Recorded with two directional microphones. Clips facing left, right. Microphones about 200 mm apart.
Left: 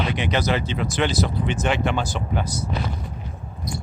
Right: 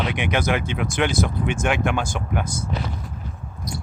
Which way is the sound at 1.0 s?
10° right (ahead or behind).